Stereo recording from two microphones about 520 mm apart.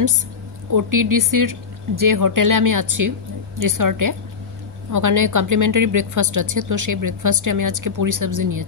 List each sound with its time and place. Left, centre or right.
0.7 s a woman's voice: right